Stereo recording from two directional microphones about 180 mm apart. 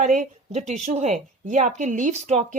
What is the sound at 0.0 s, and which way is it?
A woman's voice, 45° right (ahead or behind).